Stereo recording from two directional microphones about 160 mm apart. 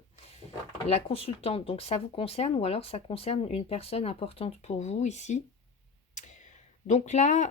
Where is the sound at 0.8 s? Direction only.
40° left (ahead or behind).